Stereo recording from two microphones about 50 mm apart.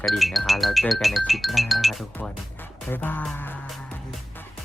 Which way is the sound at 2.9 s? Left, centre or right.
Left.